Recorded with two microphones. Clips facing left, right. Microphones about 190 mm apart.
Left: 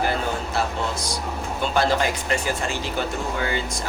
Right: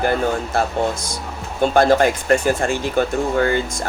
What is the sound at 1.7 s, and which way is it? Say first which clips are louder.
A woman's voice: right 7 dB; 50° right (ahead or behind).